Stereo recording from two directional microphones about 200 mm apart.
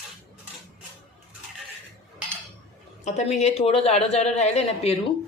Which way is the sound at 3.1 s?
35° left (ahead or behind).